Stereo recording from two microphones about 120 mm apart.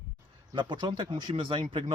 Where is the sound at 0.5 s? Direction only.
40° right (ahead or behind).